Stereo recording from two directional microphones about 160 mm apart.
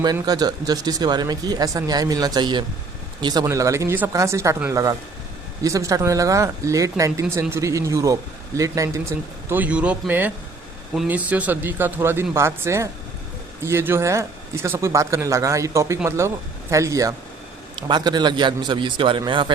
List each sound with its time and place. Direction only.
0.0 s speech: 25° right (ahead or behind)